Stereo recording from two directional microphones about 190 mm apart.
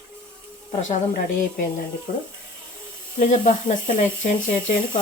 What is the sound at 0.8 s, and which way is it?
Speech, 45° left (ahead or behind).